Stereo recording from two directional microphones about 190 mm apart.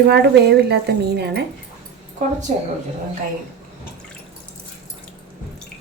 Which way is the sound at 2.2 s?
40° right (ahead or behind).